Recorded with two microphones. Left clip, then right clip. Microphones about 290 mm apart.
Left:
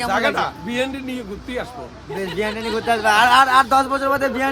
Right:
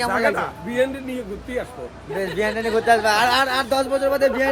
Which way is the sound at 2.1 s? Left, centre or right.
Centre.